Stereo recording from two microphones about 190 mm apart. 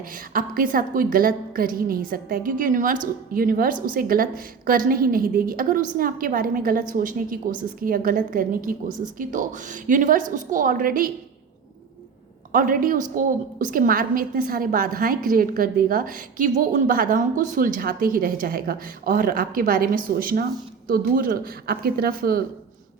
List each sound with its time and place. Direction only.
0.1 s a woman's voice: 45° right (ahead or behind)
12.5 s a woman's voice: 45° right (ahead or behind)